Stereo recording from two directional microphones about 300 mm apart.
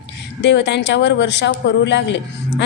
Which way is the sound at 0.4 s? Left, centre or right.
Left.